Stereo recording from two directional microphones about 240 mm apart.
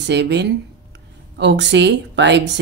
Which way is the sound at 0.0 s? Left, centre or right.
Right.